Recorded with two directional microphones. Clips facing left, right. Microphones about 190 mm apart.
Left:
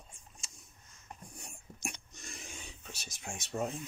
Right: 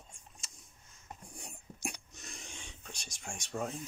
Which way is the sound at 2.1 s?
Centre (ahead or behind).